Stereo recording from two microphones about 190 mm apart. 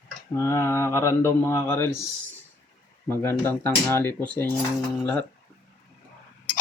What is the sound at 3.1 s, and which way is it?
Speech, 10° left (ahead or behind).